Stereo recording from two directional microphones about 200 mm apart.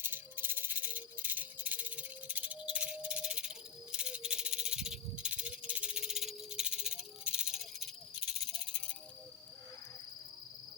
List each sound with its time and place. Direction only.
0.0 s music: 10° right (ahead or behind)